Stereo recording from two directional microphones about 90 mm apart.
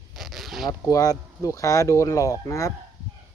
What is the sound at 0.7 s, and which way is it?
Speech, 40° left (ahead or behind).